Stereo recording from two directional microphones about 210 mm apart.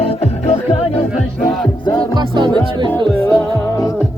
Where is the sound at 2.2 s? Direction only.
20° right (ahead or behind).